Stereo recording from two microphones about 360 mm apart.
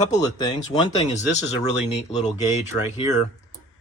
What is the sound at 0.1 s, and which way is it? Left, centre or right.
Speech, centre.